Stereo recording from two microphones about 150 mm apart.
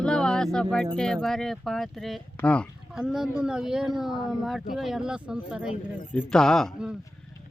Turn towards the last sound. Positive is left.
turn(degrees=0)  # may be behind; listen again after turning